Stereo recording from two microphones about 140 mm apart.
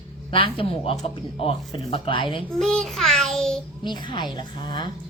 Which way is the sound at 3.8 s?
35° left (ahead or behind).